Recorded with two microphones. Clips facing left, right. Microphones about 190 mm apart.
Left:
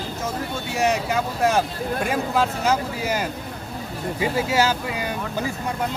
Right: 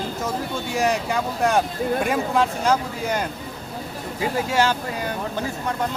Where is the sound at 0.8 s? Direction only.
Centre (ahead or behind).